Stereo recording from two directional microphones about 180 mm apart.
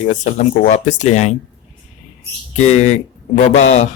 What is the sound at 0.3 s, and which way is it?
Speech, 40° left (ahead or behind).